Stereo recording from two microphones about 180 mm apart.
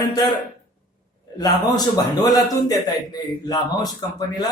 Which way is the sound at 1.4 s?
20° left (ahead or behind).